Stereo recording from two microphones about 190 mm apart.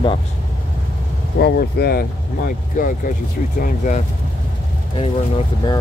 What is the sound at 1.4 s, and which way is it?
Speech, 55° left (ahead or behind).